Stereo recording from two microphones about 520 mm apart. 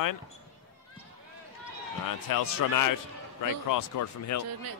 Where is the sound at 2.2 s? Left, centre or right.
Left.